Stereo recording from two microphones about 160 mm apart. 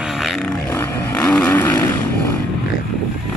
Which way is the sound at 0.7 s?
15° left (ahead or behind).